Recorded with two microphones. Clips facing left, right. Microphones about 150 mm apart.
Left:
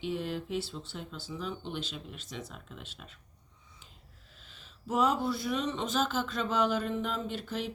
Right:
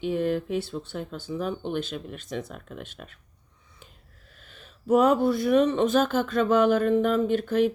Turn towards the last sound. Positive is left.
turn(degrees=-55)  # may be behind; listen again after turning